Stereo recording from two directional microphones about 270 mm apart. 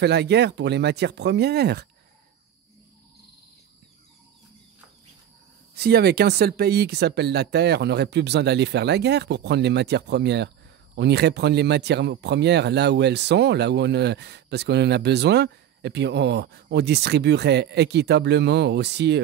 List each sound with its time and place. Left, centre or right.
0.0 s speech: right
5.8 s speech: right